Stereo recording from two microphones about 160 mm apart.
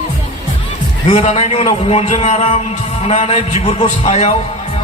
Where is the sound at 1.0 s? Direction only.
45° left (ahead or behind).